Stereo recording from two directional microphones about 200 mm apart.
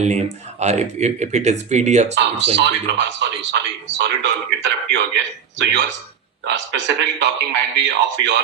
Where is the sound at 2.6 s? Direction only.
60° right (ahead or behind).